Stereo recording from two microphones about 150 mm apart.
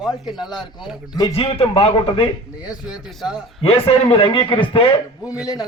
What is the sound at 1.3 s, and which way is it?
Speech, 40° left (ahead or behind).